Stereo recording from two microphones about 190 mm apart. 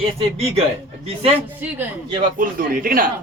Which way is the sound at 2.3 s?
50° right (ahead or behind).